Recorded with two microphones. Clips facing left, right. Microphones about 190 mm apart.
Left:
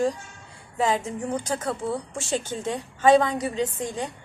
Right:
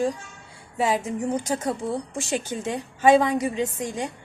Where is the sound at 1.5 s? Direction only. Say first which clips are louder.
Right 2 dB; 20° right (ahead or behind).